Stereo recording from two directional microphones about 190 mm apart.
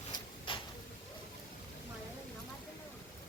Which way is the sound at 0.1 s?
25° left (ahead or behind).